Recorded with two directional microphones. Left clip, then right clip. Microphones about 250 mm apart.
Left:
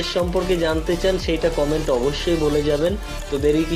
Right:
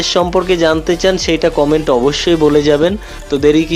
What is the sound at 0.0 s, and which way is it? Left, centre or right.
Speech, right.